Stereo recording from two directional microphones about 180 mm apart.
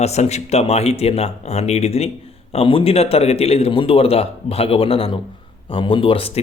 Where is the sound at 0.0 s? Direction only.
40° left (ahead or behind).